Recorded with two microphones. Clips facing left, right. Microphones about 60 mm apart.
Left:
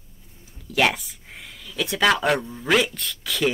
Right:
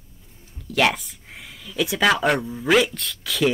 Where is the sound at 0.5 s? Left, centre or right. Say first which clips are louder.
Right 1 dB; centre.